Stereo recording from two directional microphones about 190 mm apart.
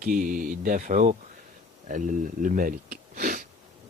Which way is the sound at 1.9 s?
45° right (ahead or behind).